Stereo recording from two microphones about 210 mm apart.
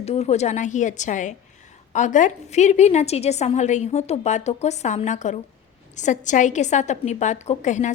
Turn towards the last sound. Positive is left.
turn(degrees=35)  # may be behind; listen again after turning